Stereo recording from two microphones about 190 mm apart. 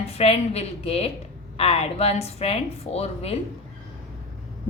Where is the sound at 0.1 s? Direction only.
30° left (ahead or behind).